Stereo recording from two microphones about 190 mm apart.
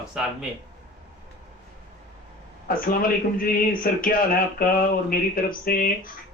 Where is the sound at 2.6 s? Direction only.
50° left (ahead or behind).